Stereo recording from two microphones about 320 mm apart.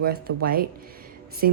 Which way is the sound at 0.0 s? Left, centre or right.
Right.